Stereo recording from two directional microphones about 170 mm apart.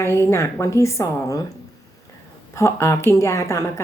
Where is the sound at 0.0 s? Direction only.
15° left (ahead or behind).